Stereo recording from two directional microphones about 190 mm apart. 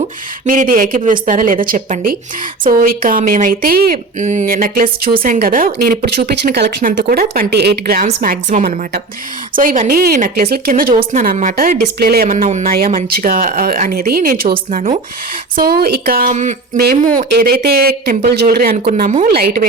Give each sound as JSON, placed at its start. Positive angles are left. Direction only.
{"t": 0.0, "sound": "a woman's voice", "side_deg": -45}
{"t": 15.5, "sound": "a woman's voice", "side_deg": -55}
{"t": 16.8, "sound": "a woman's voice", "side_deg": -50}